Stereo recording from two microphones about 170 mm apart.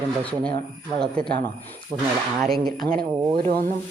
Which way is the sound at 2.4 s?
Centre (ahead or behind).